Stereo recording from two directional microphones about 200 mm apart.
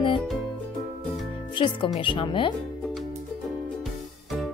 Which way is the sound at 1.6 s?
25° left (ahead or behind).